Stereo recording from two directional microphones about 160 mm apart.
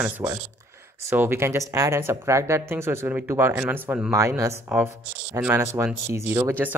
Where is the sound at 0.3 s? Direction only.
15° right (ahead or behind).